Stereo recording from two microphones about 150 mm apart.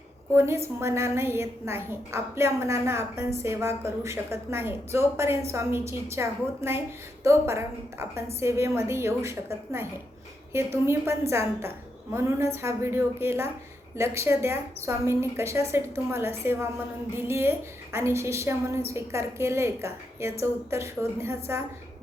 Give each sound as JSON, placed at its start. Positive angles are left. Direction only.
{"t": 0.3, "sound": "a woman's voice", "side_deg": -15}
{"t": 10.8, "sound": "a woman's voice", "side_deg": -20}